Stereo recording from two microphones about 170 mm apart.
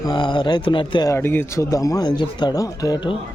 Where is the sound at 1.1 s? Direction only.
15° left (ahead or behind).